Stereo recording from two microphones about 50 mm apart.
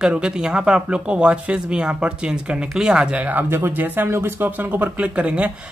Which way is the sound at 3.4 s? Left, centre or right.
Right.